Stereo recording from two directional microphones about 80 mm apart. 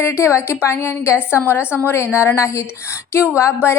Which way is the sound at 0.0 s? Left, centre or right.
Left.